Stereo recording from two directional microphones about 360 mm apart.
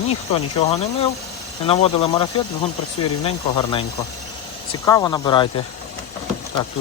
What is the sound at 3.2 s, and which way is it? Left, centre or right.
Speech, centre.